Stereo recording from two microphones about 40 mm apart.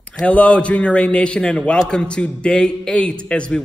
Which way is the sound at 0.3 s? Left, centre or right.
Left.